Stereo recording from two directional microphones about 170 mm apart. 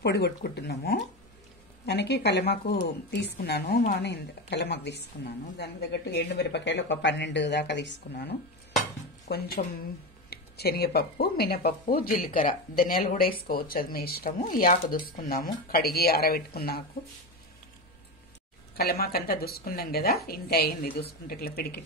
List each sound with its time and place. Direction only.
0.0 s speech: 75° left (ahead or behind)
9.3 s a woman's voice: 50° left (ahead or behind)
10.3 s speech: 70° left (ahead or behind)
18.8 s speech: 65° left (ahead or behind)